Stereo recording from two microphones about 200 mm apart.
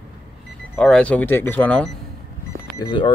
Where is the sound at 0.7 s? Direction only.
5° left (ahead or behind).